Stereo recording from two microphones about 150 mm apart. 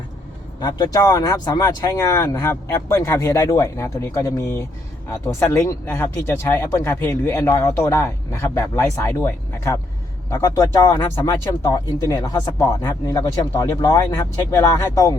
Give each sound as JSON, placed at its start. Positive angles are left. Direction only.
{"t": 0.6, "sound": "speech", "side_deg": 25}